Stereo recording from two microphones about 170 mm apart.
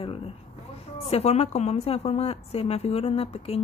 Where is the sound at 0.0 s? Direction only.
35° left (ahead or behind).